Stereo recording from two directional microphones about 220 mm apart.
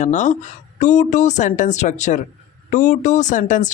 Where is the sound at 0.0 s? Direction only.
35° left (ahead or behind).